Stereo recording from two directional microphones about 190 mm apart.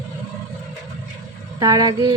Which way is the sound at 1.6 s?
20° right (ahead or behind).